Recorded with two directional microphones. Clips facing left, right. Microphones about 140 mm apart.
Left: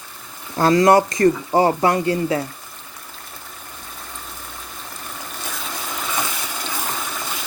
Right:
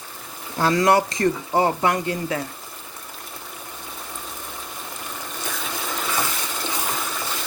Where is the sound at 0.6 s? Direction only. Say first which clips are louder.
Left 4 dB; 40° left (ahead or behind).